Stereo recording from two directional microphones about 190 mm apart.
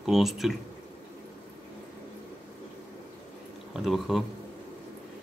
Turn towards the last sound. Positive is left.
turn(degrees=0)  # may be behind; listen again after turning